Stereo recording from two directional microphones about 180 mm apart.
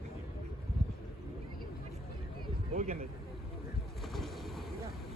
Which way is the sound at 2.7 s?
45° right (ahead or behind).